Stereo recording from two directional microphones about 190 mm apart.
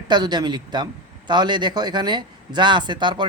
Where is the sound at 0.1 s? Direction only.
20° right (ahead or behind).